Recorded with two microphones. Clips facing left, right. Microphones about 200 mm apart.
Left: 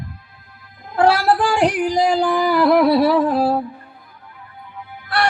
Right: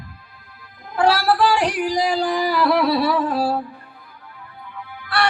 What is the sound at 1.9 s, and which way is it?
Speech, 50° left (ahead or behind).